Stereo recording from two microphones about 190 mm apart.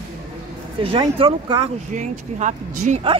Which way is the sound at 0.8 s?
25° right (ahead or behind).